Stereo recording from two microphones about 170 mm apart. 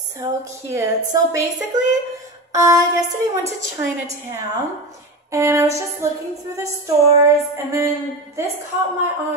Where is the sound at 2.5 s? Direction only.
20° right (ahead or behind).